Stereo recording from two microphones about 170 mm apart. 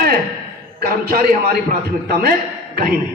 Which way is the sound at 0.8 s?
60° right (ahead or behind).